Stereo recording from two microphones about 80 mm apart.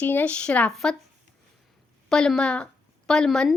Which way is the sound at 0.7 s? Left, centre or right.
Centre.